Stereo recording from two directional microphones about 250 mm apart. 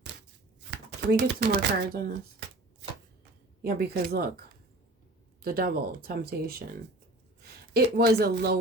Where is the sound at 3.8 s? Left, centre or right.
Right.